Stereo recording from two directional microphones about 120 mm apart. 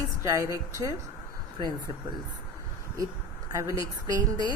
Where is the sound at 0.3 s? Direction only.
25° right (ahead or behind).